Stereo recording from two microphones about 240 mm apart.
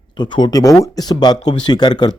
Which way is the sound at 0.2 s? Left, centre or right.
Centre.